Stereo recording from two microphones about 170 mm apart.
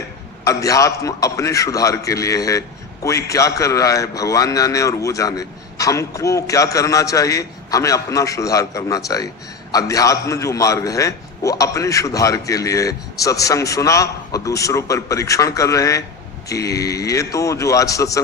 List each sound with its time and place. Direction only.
0.4 s a man's voice: 20° left (ahead or behind)